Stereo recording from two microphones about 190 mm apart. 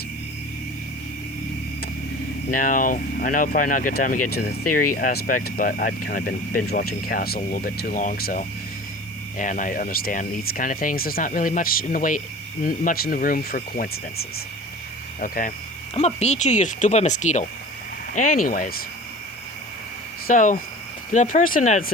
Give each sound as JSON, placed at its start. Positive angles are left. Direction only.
{"t": 2.5, "sound": "speech", "side_deg": 45}
{"t": 9.4, "sound": "speech", "side_deg": 45}
{"t": 16.0, "sound": "speech", "side_deg": 35}
{"t": 20.2, "sound": "speech", "side_deg": 45}